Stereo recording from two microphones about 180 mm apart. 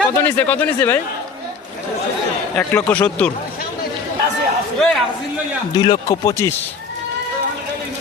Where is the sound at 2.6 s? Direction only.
10° left (ahead or behind).